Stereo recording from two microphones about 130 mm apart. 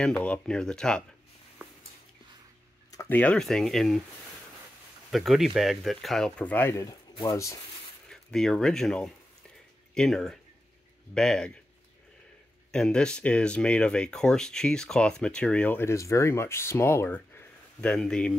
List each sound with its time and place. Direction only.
0.2 s speech: 5° left (ahead or behind)
3.1 s speech: 10° left (ahead or behind)
5.1 s speech: centre (ahead or behind); by 7.6 s 25° left (ahead or behind)
8.1 s speech: 5° left (ahead or behind)
12.7 s speech: 5° left (ahead or behind)